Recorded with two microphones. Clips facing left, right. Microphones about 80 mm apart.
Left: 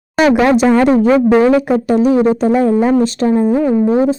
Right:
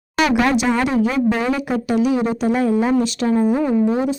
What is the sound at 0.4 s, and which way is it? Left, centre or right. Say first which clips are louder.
Speech: left 8 dB; left.